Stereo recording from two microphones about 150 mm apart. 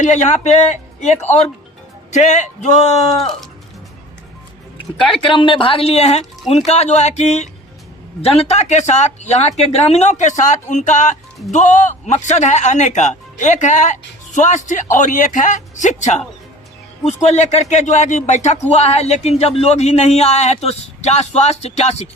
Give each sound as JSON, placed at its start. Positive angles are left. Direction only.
{"t": 0.0, "sound": "speech", "side_deg": 50}
{"t": 5.2, "sound": "speech", "side_deg": 35}